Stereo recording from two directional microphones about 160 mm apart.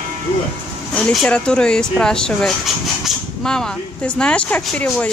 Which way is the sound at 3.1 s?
5° left (ahead or behind).